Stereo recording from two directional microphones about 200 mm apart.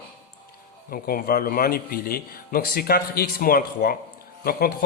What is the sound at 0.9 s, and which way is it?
Speech, 45° left (ahead or behind).